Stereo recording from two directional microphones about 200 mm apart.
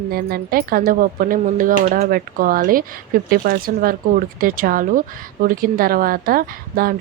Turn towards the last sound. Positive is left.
turn(degrees=-45)  # may be behind; listen again after turning